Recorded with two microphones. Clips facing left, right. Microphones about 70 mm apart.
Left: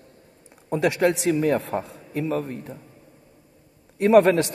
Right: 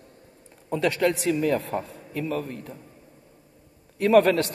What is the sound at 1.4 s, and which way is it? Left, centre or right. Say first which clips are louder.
A man's voice: left 2 dB; left.